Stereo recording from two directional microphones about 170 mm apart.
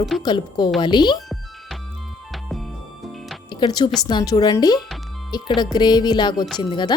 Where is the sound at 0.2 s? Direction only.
25° left (ahead or behind).